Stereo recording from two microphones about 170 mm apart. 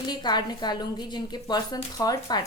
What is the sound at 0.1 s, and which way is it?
A woman's voice, 25° left (ahead or behind).